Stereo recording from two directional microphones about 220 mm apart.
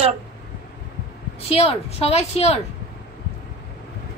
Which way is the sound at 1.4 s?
25° left (ahead or behind).